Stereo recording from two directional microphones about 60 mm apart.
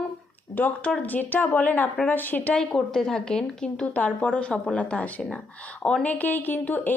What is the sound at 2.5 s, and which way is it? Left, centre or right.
A woman's voice, centre.